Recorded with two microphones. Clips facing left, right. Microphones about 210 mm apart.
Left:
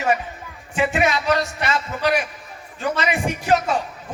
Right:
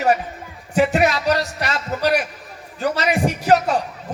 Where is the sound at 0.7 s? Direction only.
40° right (ahead or behind).